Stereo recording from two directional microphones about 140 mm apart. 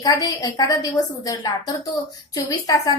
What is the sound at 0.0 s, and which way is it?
A woman's voice, 25° left (ahead or behind).